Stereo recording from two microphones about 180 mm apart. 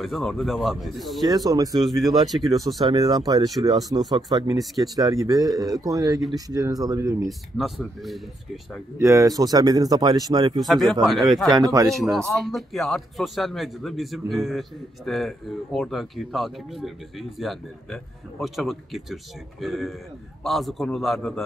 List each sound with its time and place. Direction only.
0.0 s a man's voice: centre (ahead or behind)
1.2 s speech: 20° right (ahead or behind)
1.8 s a man's voice: centre (ahead or behind)
2.8 s speech: 20° right (ahead or behind)
7.2 s a man's voice: centre (ahead or behind)
8.9 s speech: 15° right (ahead or behind)
10.6 s a man's voice: centre (ahead or behind)
11.5 s speech: 20° right (ahead or behind)
11.9 s a man's voice: centre (ahead or behind)